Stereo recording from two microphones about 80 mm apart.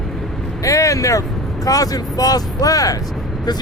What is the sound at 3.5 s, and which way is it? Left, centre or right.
Speech, left.